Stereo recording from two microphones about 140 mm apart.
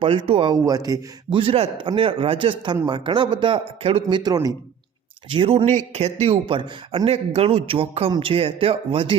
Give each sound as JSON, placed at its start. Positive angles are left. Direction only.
{"t": 0.0, "sound": "speech", "side_deg": -40}
{"t": 0.5, "sound": "speech", "side_deg": -25}
{"t": 4.2, "sound": "speech", "side_deg": -25}
{"t": 5.3, "sound": "speech", "side_deg": -40}
{"t": 5.6, "sound": "speech", "side_deg": -50}